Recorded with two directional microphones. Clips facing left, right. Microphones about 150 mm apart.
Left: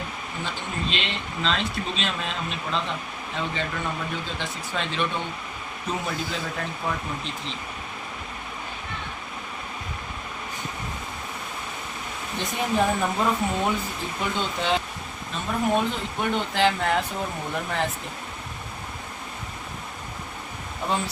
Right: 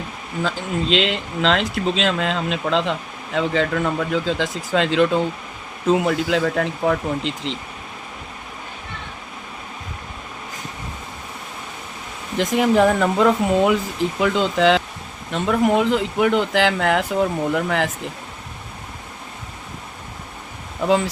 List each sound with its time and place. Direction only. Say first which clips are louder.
0.4 s speech: right 9 dB; 90° right
12.4 s speech: right 9 dB; 90° right
15.3 s speech: right 7 dB; 75° right (ahead or behind); by 17.9 s 90° right